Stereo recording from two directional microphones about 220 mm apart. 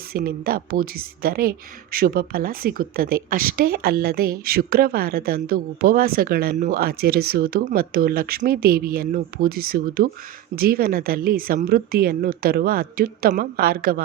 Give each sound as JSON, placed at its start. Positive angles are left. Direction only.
{"t": 0.1, "sound": "a woman's voice", "side_deg": -45}